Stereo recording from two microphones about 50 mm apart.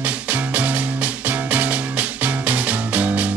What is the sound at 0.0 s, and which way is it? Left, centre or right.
Music, right.